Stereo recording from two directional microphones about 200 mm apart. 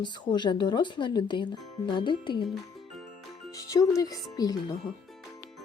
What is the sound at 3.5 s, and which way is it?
A woman's voice, 15° left (ahead or behind).